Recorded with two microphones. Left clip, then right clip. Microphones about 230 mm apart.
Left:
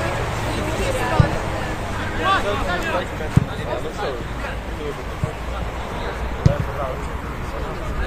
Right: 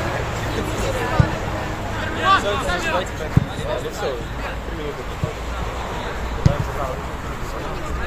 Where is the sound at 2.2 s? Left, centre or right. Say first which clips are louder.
Right 2 dB; right.